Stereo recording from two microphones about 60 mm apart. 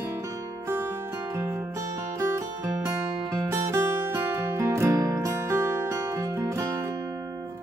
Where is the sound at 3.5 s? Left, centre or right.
Right.